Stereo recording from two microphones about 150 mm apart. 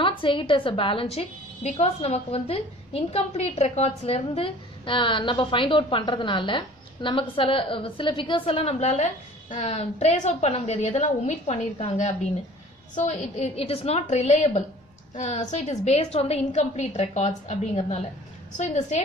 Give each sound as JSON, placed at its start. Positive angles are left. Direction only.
{"t": 0.0, "sound": "a woman's voice", "side_deg": 35}